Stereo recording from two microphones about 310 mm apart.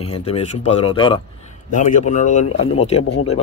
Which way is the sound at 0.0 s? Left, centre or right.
Centre.